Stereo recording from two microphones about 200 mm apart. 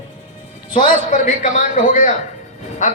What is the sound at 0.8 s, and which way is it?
A man's voice, 40° left (ahead or behind).